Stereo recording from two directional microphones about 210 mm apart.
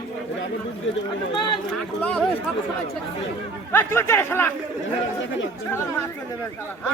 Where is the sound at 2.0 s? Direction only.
5° left (ahead or behind).